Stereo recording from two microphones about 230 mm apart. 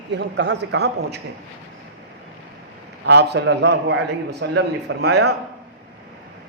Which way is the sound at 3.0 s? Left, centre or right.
Right.